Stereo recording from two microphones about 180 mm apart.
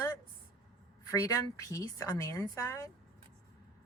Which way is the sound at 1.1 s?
20° left (ahead or behind).